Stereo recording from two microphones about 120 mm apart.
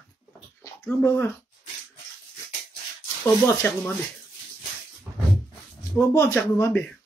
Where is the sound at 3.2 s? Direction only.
20° left (ahead or behind).